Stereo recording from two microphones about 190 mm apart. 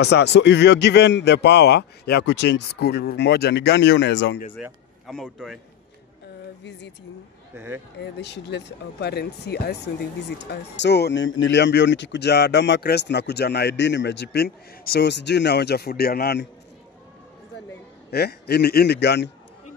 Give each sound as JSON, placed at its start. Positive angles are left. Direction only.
{"t": 0.0, "sound": "speech", "side_deg": 60}
{"t": 4.6, "sound": "speech", "side_deg": -5}
{"t": 7.5, "sound": "speech", "side_deg": -10}
{"t": 8.0, "sound": "speech", "side_deg": 65}
{"t": 18.1, "sound": "speech", "side_deg": 55}